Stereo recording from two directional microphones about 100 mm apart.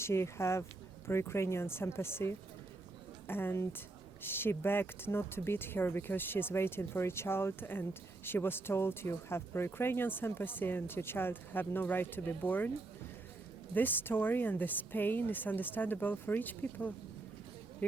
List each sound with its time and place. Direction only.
0.0 s speech: 25° left (ahead or behind)
13.7 s speech: 20° left (ahead or behind)